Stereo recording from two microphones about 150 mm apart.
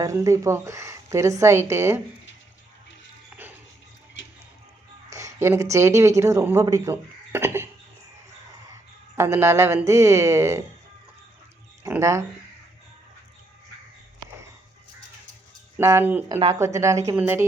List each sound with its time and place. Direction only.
0.0 s speech: 20° right (ahead or behind)
5.1 s speech: 20° right (ahead or behind)
8.7 s speech: 20° right (ahead or behind)
11.8 s speech: 20° right (ahead or behind)
15.8 s speech: 20° right (ahead or behind)